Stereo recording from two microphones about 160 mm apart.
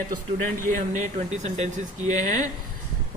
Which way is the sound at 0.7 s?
50° right (ahead or behind).